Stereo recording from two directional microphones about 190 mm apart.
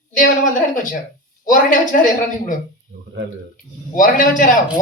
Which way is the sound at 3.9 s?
45° left (ahead or behind).